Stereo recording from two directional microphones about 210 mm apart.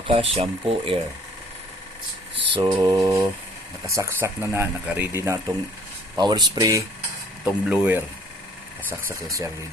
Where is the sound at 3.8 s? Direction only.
15° right (ahead or behind).